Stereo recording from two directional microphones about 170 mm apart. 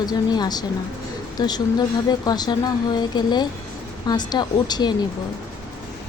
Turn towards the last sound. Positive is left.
turn(degrees=25)  # may be behind; listen again after turning